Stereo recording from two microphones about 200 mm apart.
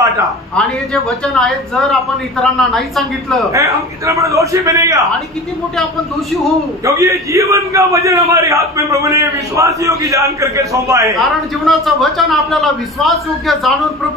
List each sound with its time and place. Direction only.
0.6 s speech: 5° left (ahead or behind)
3.5 s a man's voice: 15° right (ahead or behind)
6.8 s a man's voice: 15° right (ahead or behind)
11.1 s speech: centre (ahead or behind)